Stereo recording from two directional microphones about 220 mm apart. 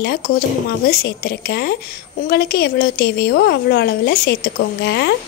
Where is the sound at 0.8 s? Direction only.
45° left (ahead or behind).